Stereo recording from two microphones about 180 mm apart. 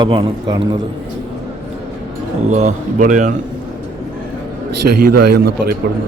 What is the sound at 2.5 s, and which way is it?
Speech, 40° right (ahead or behind).